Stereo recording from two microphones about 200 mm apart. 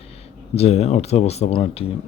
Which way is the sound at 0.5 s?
30° left (ahead or behind).